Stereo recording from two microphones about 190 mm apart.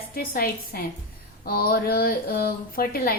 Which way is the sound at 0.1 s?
50° left (ahead or behind).